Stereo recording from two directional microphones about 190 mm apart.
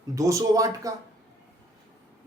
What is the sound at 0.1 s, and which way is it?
Speech, 15° right (ahead or behind).